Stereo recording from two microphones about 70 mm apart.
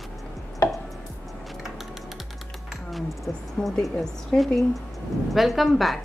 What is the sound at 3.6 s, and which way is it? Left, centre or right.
Speech, centre.